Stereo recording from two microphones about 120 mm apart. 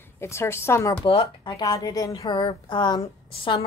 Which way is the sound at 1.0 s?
50° left (ahead or behind).